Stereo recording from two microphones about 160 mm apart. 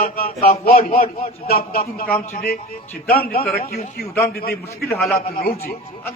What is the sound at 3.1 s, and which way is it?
Speech, 70° left (ahead or behind).